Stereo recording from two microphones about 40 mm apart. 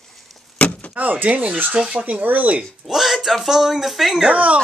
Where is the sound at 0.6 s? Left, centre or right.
Left.